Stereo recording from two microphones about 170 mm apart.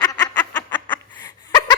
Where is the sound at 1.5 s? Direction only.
25° left (ahead or behind).